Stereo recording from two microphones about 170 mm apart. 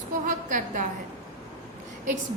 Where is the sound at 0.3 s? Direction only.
50° right (ahead or behind).